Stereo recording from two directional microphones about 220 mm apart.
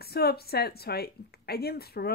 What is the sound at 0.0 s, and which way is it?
A woman's voice, 45° left (ahead or behind).